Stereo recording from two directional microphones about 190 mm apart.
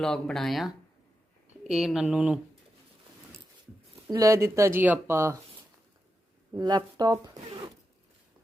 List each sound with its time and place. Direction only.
0.0 s speech: 5° left (ahead or behind)
4.1 s speech: 15° right (ahead or behind)
6.5 s speech: 20° right (ahead or behind)